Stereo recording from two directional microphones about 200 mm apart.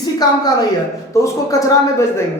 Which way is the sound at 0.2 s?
20° left (ahead or behind).